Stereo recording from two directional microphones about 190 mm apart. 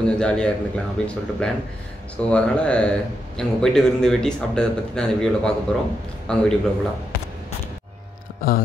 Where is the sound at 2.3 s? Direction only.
5° left (ahead or behind).